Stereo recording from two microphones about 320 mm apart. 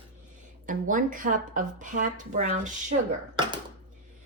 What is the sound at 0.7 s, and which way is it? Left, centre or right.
A woman's voice, right.